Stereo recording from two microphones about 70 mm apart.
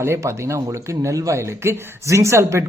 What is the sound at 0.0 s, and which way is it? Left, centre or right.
A man's voice, right.